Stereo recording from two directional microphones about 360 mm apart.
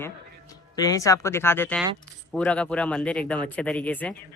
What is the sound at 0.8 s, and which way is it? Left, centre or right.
Speech, centre.